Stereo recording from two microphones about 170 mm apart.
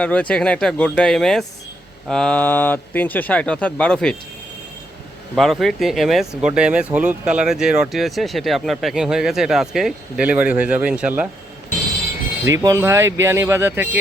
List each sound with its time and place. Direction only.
0.0 s speech: 5° left (ahead or behind)
5.3 s speech: centre (ahead or behind)
12.5 s speech: 20° right (ahead or behind)